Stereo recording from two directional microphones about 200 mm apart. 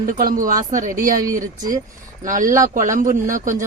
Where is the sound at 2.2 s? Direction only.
40° right (ahead or behind).